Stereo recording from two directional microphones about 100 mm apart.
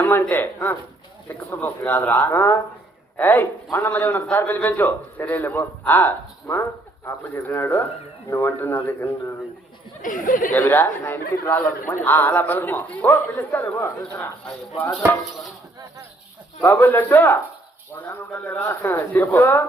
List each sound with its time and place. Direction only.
0.0 s a man's voice: 20° left (ahead or behind)
10.5 s a man's voice: 20° left (ahead or behind)
16.6 s a man's voice: 20° left (ahead or behind)